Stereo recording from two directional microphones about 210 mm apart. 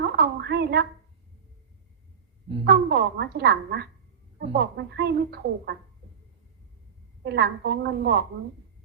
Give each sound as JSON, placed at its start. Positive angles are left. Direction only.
{"t": 0.0, "sound": "a sound", "side_deg": -50}
{"t": 2.6, "sound": "a woman's voice", "side_deg": -50}
{"t": 7.3, "sound": "a woman's voice", "side_deg": -50}